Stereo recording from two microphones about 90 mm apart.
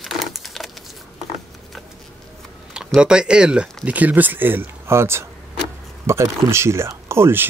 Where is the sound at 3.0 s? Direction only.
10° right (ahead or behind).